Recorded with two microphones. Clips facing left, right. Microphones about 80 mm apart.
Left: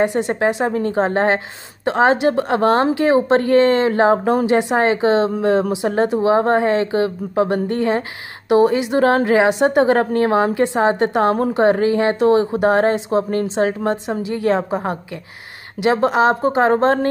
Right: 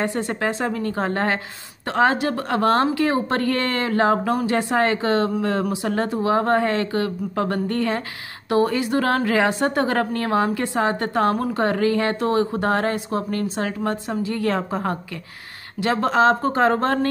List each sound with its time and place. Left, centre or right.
0.0 s a woman's voice: centre